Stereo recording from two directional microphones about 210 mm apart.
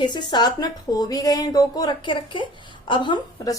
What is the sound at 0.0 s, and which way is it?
A woman's voice, 20° left (ahead or behind).